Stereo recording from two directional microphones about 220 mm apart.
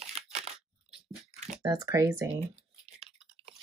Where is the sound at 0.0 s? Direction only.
30° right (ahead or behind).